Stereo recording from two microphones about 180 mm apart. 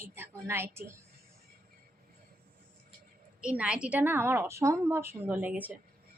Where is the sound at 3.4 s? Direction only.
5° right (ahead or behind).